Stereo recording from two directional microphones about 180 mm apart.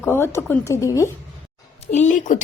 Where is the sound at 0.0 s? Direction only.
15° left (ahead or behind).